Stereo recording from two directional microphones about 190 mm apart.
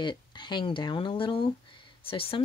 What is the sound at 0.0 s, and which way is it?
Speech, 25° left (ahead or behind).